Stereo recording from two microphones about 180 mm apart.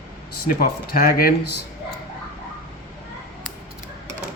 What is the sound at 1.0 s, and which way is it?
Speech, 55° left (ahead or behind).